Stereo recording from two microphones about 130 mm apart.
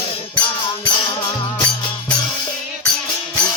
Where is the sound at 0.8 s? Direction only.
35° left (ahead or behind).